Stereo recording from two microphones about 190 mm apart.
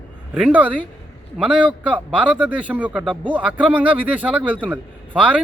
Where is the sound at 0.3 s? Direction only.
10° right (ahead or behind).